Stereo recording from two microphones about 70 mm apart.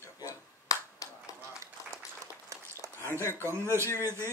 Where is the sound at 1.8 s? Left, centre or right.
Left.